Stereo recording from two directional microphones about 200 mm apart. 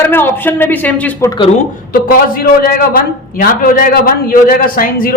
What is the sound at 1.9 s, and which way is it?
A man's voice, 50° left (ahead or behind).